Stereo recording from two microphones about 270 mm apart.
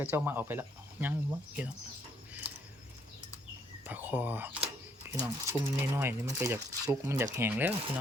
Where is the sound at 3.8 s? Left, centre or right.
Centre.